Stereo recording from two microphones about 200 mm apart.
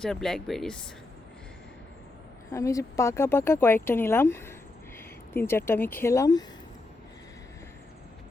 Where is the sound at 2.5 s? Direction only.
15° left (ahead or behind).